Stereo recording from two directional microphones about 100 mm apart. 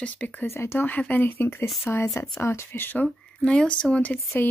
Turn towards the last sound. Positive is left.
turn(degrees=20)  # may be behind; listen again after turning